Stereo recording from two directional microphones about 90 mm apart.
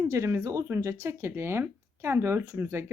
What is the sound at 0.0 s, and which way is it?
A woman's voice, 35° right (ahead or behind).